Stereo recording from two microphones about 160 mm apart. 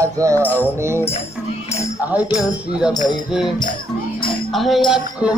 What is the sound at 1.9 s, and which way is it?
Speech, 10° right (ahead or behind).